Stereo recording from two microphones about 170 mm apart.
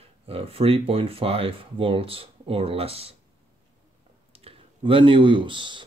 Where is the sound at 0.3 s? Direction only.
35° right (ahead or behind).